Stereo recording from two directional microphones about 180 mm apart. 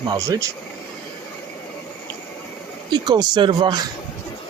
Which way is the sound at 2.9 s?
25° right (ahead or behind).